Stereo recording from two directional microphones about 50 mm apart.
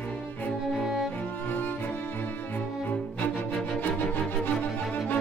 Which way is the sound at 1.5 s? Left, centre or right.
Left.